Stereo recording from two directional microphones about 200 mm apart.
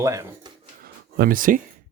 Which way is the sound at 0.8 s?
50° right (ahead or behind).